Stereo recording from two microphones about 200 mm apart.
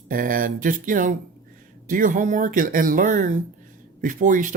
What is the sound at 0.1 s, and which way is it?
Speech, 45° right (ahead or behind).